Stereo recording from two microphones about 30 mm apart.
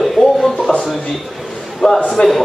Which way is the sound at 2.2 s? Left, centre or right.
Left.